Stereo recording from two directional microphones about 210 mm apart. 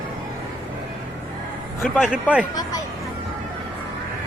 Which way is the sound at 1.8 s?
Centre (ahead or behind).